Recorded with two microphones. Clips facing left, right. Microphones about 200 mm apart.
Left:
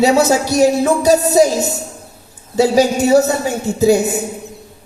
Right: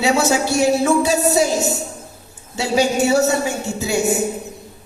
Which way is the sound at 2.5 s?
40° left (ahead or behind).